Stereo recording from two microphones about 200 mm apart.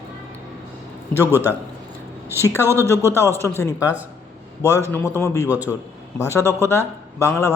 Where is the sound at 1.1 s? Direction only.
10° right (ahead or behind).